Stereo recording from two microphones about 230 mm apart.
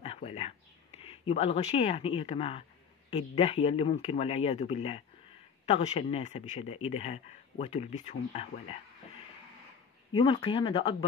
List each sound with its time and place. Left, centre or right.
0.0 s a sound: left
3.1 s speech: left
10.1 s speech: left